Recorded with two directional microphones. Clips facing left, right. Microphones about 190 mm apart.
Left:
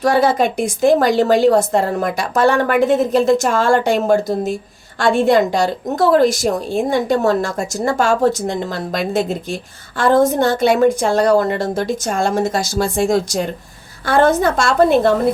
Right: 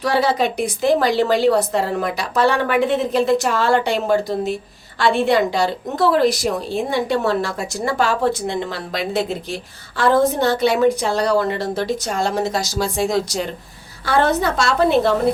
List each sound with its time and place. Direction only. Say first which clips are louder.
0.0 s a woman's voice: left 4 dB; 50° left (ahead or behind)